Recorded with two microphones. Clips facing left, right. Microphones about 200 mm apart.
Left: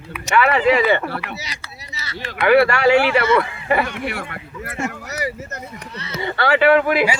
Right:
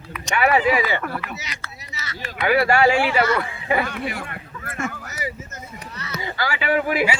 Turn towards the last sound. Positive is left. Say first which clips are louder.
# left 6 dB
turn(degrees=70)  # may be behind; listen again after turning